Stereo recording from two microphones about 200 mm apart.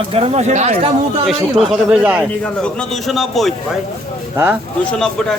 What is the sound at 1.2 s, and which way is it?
A man's voice, 5° right (ahead or behind).